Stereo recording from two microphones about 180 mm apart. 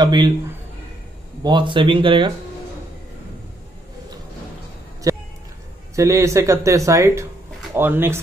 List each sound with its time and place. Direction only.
0.0 s speech: 25° right (ahead or behind)
1.4 s speech: 25° right (ahead or behind)
5.1 s a sound: 20° right (ahead or behind)
5.9 s speech: 15° right (ahead or behind)